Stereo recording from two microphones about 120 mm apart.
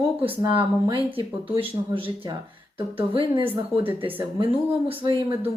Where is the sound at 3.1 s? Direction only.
50° right (ahead or behind).